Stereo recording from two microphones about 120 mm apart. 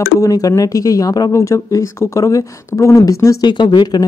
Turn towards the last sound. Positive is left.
turn(degrees=35)  # may be behind; listen again after turning